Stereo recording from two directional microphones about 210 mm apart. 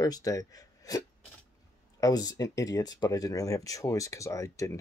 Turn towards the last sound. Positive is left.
turn(degrees=15)  # may be behind; listen again after turning